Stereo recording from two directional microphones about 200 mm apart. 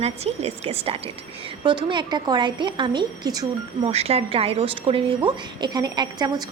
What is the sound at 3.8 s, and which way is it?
A woman's voice, 30° right (ahead or behind).